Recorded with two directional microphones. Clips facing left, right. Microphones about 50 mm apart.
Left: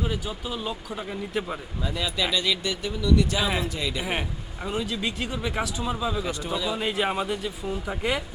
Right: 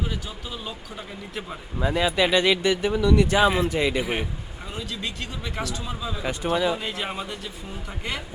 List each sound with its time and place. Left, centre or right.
0.0 s a man's voice: centre
1.8 s speech: right
4.0 s a man's voice: centre
6.5 s speech: right
6.7 s a man's voice: centre